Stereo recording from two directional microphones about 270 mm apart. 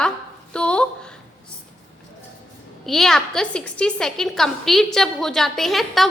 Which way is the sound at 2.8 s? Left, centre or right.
Centre.